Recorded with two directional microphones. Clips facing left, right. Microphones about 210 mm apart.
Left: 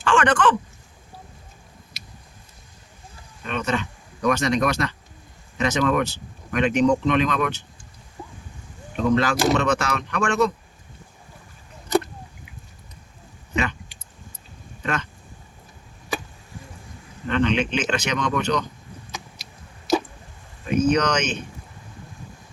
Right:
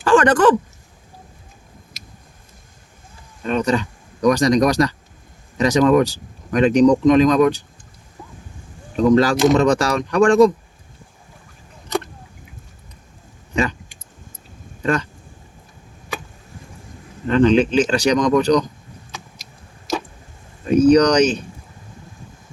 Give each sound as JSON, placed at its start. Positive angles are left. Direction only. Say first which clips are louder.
{"t": 0.0, "sound": "a sound", "louder": "right 6 dB", "side_deg": -35}
{"t": 2.0, "sound": "tick", "louder": "right 2 dB", "side_deg": -45}
{"t": 3.4, "sound": "speech", "louder": "right 7 dB", "side_deg": -35}
{"t": 9.0, "sound": "speech", "louder": "right 7 dB", "side_deg": -35}
{"t": 13.6, "sound": "a sound", "louder": "right 5 dB", "side_deg": -35}
{"t": 17.2, "sound": "speech", "louder": "right 8 dB", "side_deg": -35}
{"t": 20.7, "sound": "speech", "louder": "right 8 dB", "side_deg": -35}